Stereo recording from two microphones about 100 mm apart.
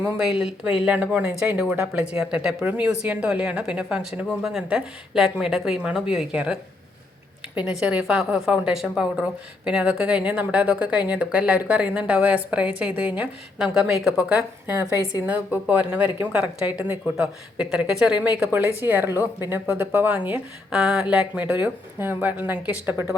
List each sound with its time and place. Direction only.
0.0 s speech: 10° right (ahead or behind)
18.8 s speech: 20° right (ahead or behind)
20.7 s speech: 5° right (ahead or behind)